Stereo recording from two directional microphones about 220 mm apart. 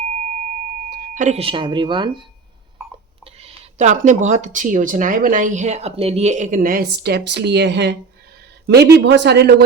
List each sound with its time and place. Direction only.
0.9 s speech: 40° right (ahead or behind); by 2.2 s 20° right (ahead or behind)
3.4 s speech: 30° right (ahead or behind); by 9.6 s 50° right (ahead or behind)